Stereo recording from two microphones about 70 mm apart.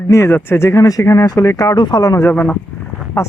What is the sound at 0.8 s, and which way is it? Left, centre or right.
Speech, left.